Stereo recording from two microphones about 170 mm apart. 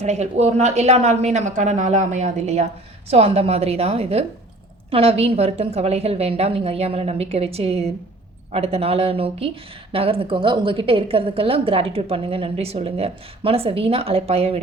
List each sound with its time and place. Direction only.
0.0 s a woman's voice: 40° right (ahead or behind)